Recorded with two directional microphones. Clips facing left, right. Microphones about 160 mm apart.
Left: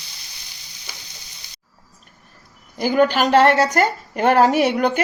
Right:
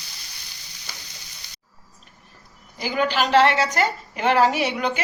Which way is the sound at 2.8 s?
50° left (ahead or behind).